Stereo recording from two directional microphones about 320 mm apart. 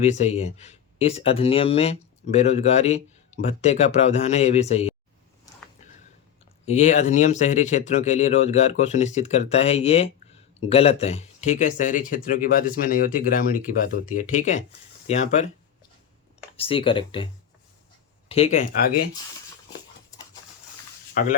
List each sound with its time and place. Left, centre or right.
0.0 s speech: left
6.7 s speech: left
16.6 s speech: centre
18.3 s speech: centre
21.2 s speech: left